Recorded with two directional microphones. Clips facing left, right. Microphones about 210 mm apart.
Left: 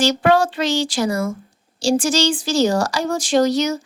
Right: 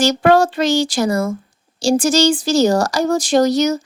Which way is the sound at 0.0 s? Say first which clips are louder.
Right 3 dB; 45° right (ahead or behind).